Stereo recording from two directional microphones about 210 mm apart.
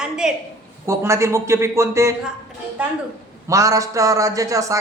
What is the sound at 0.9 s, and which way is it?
A man's voice, 15° right (ahead or behind).